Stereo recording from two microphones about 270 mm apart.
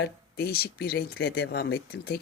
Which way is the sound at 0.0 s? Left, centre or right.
Left.